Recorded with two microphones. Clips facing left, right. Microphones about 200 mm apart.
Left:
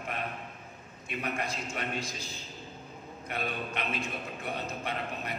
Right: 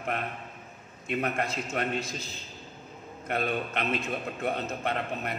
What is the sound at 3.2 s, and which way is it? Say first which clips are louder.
A man's voice: right 6 dB; 55° right (ahead or behind).